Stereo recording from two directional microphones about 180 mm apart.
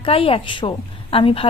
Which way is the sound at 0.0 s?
30° left (ahead or behind).